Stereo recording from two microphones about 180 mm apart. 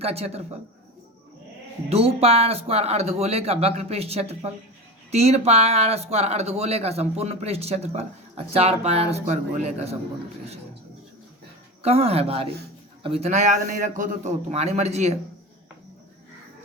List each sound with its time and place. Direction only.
0.0 s speech: 35° right (ahead or behind)
1.9 s speech: 35° right (ahead or behind)
11.8 s speech: 35° right (ahead or behind)